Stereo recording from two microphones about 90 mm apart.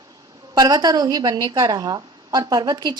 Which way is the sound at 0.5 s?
50° right (ahead or behind).